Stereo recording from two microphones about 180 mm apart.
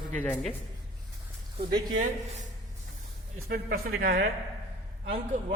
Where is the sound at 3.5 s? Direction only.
55° right (ahead or behind).